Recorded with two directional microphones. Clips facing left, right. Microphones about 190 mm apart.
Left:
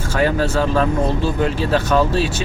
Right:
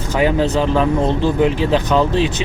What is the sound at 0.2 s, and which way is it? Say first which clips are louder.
Speech: right 2 dB; 20° right (ahead or behind).